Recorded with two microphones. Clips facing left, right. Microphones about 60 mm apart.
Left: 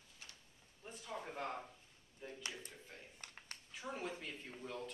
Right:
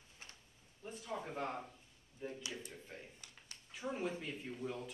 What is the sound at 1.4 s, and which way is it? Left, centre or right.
Speech, centre.